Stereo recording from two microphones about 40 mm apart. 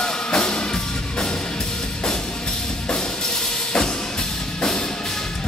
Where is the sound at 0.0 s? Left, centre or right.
Centre.